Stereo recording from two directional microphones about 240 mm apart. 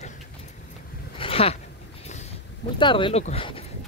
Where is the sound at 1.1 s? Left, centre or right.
Left.